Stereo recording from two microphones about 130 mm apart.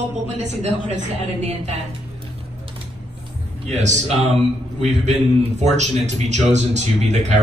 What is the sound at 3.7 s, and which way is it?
A man's voice, 60° right (ahead or behind).